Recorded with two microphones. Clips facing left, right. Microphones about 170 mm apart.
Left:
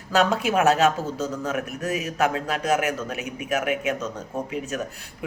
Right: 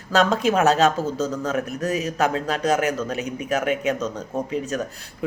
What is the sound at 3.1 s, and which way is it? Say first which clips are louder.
Speech: right 4 dB; 35° right (ahead or behind).